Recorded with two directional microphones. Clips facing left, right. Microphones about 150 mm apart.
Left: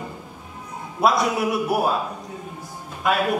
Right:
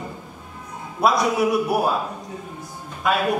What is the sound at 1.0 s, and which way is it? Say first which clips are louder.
Speech: right 1 dB; centre (ahead or behind).